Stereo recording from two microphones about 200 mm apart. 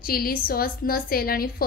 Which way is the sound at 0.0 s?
50° left (ahead or behind).